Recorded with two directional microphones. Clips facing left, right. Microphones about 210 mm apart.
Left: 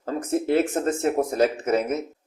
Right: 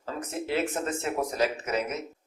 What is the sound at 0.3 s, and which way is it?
Speech, 50° left (ahead or behind).